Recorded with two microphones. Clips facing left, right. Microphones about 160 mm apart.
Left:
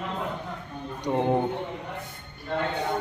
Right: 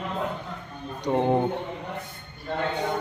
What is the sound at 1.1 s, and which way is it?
Speech, 10° right (ahead or behind).